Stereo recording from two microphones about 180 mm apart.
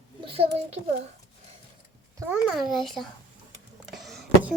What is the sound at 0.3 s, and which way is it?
Speech, 35° right (ahead or behind).